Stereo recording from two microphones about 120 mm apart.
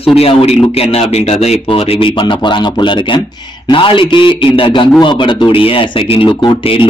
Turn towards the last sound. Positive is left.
turn(degrees=45)  # may be behind; listen again after turning